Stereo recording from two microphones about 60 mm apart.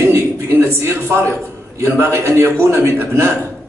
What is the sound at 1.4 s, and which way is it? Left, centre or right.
A man's voice, right.